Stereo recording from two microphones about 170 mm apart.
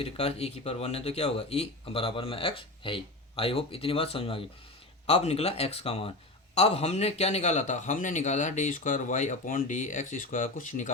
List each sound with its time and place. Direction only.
0.0 s a man's voice: 35° left (ahead or behind)